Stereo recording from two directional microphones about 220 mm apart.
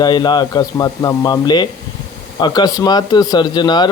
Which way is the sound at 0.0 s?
20° left (ahead or behind).